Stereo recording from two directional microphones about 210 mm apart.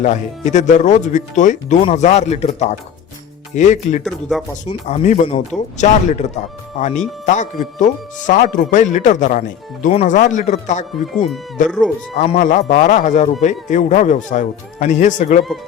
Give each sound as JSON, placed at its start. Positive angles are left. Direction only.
{"t": 0.0, "sound": "speech", "side_deg": 35}
{"t": 4.0, "sound": "speech", "side_deg": 0}
{"t": 4.6, "sound": "speech", "side_deg": 35}